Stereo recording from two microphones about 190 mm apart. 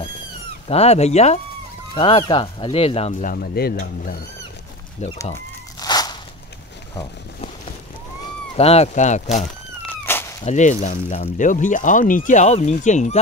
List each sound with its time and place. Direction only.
0.7 s speech: 35° left (ahead or behind)
3.2 s speech: 50° left (ahead or behind)
5.2 s a sound: 15° left (ahead or behind)
8.5 s speech: 35° left (ahead or behind)
9.8 s cat: 10° left (ahead or behind)
10.4 s speech: 40° left (ahead or behind)